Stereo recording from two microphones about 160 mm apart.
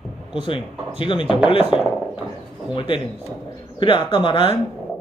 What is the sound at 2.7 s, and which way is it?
Speech, 30° left (ahead or behind).